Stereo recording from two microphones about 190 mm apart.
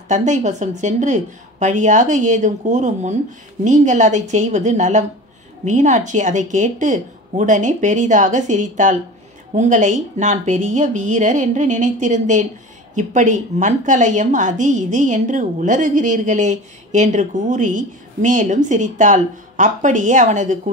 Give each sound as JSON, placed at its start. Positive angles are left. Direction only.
{"t": 0.1, "sound": "a woman's voice", "side_deg": -40}